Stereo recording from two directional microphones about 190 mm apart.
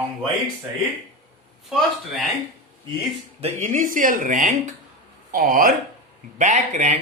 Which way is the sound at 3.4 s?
40° right (ahead or behind).